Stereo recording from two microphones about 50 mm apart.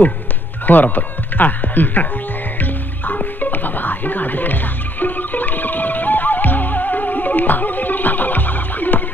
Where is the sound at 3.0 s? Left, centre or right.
Left.